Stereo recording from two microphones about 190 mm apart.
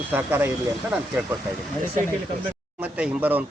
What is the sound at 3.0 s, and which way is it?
Speech, 10° right (ahead or behind).